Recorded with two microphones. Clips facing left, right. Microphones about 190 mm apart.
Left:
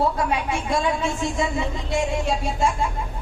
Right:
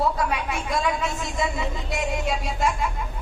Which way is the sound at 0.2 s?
30° left (ahead or behind).